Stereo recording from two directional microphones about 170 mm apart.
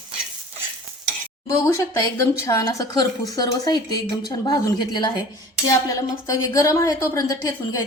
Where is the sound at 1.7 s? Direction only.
20° left (ahead or behind).